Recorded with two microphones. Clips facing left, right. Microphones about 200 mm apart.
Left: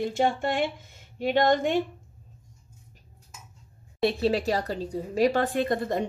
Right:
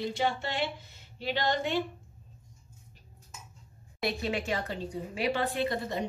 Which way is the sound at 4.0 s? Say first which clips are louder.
Left 8 dB; 35° left (ahead or behind).